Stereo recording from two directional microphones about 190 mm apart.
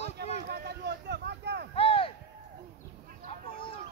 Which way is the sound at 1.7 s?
30° left (ahead or behind).